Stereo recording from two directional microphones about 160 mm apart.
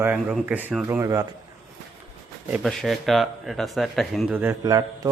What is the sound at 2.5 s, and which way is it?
Speech, centre (ahead or behind).